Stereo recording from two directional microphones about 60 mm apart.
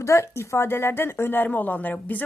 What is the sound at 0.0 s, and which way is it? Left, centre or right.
Speech, left.